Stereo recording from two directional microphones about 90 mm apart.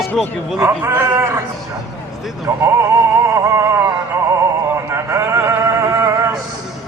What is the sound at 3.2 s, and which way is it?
Music, 35° right (ahead or behind).